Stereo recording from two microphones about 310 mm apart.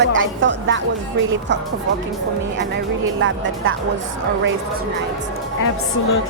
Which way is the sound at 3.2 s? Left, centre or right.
Right.